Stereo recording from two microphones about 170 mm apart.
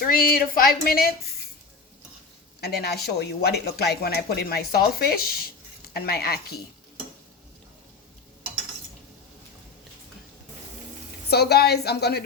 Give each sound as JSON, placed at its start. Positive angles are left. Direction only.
{"t": 0.0, "sound": "speech", "side_deg": 60}
{"t": 2.6, "sound": "speech", "side_deg": 70}
{"t": 11.3, "sound": "speech", "side_deg": 70}